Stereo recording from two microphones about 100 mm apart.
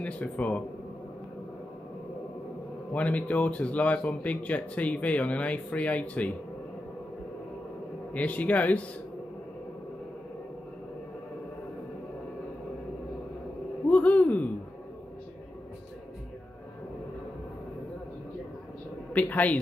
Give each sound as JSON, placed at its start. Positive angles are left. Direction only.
{"t": 0.0, "sound": "speech", "side_deg": 15}
{"t": 2.9, "sound": "speech", "side_deg": 15}
{"t": 8.1, "sound": "speech", "side_deg": 15}
{"t": 13.8, "sound": "a sound", "side_deg": 15}
{"t": 19.1, "sound": "a man's voice", "side_deg": 15}